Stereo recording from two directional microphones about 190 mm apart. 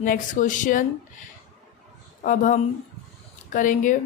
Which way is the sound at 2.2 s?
45° left (ahead or behind).